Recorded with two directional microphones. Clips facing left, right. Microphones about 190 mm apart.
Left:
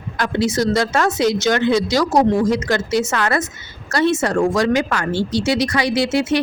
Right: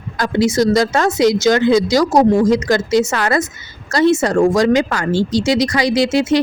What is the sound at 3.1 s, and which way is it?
Speech, 35° right (ahead or behind).